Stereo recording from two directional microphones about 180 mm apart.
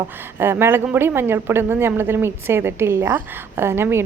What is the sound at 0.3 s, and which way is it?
A woman's voice, 15° right (ahead or behind).